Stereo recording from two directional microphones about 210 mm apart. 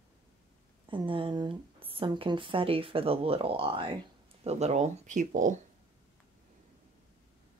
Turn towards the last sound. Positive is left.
turn(degrees=-35)  # may be behind; listen again after turning